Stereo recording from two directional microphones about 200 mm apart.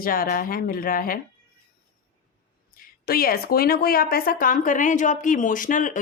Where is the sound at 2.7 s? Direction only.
45° left (ahead or behind).